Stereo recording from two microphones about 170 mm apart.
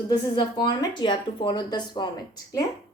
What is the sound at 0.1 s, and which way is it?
A woman's voice, 25° left (ahead or behind).